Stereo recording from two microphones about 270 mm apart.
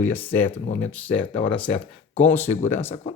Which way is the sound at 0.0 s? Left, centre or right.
Centre.